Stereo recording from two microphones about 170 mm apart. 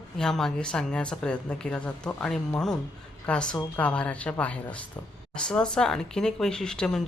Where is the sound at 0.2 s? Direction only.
5° left (ahead or behind).